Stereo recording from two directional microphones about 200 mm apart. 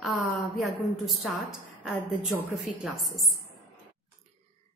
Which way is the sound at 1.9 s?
5° left (ahead or behind).